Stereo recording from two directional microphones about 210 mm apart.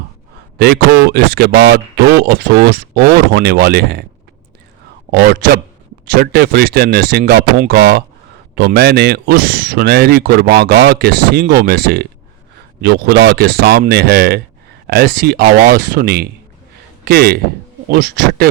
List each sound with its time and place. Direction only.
0.6 s speech: 50° right (ahead or behind)
5.1 s speech: 50° right (ahead or behind)